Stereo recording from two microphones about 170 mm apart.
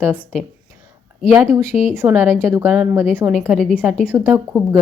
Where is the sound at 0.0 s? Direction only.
10° right (ahead or behind).